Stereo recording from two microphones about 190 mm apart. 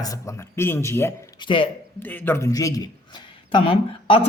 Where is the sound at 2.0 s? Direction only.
10° left (ahead or behind); by 4.2 s 30° left (ahead or behind).